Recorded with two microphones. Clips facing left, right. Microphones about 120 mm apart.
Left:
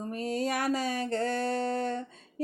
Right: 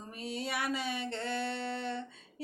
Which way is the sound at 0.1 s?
45° left (ahead or behind).